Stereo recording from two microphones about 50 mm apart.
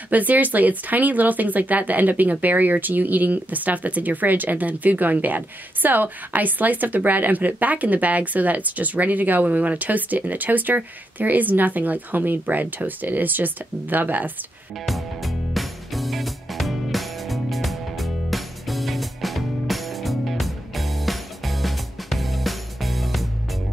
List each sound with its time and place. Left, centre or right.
0.1 s speech: right
14.9 s music: centre